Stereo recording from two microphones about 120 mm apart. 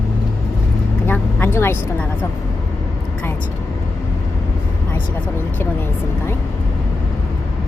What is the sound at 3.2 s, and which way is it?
Vehicle, 20° left (ahead or behind).